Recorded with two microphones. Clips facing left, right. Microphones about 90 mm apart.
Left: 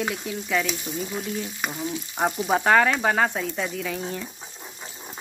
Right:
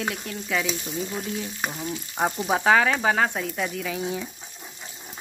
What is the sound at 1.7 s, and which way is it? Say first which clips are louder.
Frying: left 2 dB; 15° left (ahead or behind).